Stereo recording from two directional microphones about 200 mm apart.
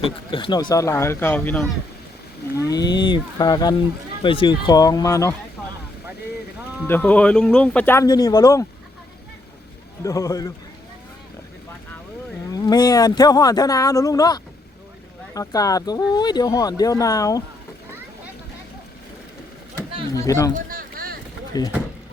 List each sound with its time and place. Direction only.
0.0 s speech: 25° left (ahead or behind)
6.8 s speech: 10° left (ahead or behind)
10.0 s speech: 15° left (ahead or behind)
12.5 s speech: 20° left (ahead or behind)
19.7 s chatter: 15° left (ahead or behind)
20.5 s a sound: 45° right (ahead or behind)
21.5 s speech: 20° left (ahead or behind)